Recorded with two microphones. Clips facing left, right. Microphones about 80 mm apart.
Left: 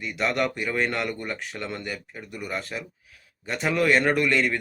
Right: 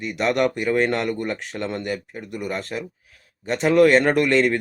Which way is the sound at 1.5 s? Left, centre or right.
Right.